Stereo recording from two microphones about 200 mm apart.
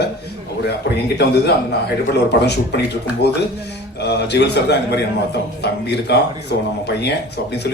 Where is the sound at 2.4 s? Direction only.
55° left (ahead or behind).